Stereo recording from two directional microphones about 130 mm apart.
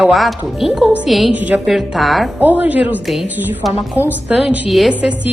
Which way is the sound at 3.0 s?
Centre (ahead or behind).